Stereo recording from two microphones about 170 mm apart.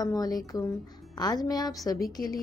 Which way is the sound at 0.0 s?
20° left (ahead or behind).